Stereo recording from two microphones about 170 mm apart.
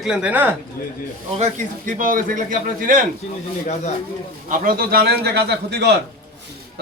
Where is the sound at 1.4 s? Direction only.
50° right (ahead or behind).